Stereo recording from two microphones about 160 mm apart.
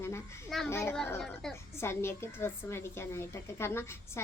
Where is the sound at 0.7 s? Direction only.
15° left (ahead or behind).